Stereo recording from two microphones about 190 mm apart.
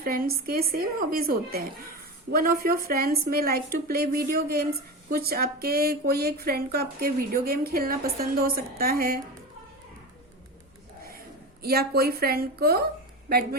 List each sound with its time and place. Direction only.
0.0 s speech: 50° right (ahead or behind)
11.6 s speech: 55° right (ahead or behind)